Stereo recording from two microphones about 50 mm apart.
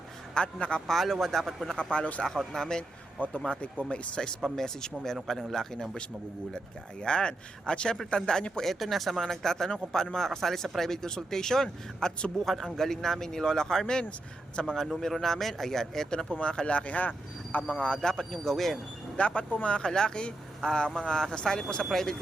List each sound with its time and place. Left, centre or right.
0.4 s speech: left
0.9 s speech: centre
1.7 s speech: left
2.5 s a man's voice: centre
3.2 s speech: left
4.5 s a man's voice: centre
7.0 s a man's voice: centre
8.6 s a man's voice: centre
19.1 s a man's voice: left